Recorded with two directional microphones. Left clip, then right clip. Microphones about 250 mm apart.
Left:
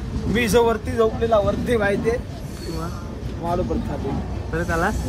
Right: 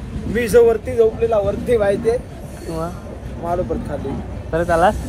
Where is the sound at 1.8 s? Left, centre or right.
Left.